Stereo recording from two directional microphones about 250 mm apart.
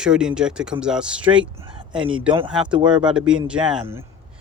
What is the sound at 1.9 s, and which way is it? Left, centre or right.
Speech, centre.